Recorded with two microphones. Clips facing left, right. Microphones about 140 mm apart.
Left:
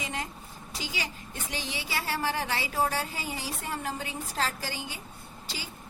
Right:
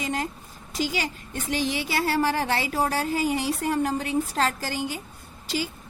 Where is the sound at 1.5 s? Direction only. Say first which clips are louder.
Right 9 dB; 40° right (ahead or behind).